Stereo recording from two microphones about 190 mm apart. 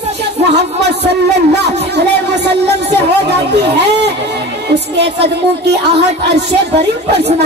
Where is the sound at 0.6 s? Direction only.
60° right (ahead or behind).